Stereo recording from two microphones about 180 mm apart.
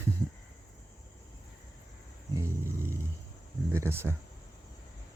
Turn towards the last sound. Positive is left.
turn(degrees=-15)  # may be behind; listen again after turning